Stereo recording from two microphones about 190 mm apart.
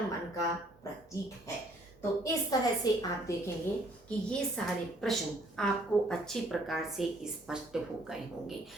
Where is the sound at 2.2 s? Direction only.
20° left (ahead or behind).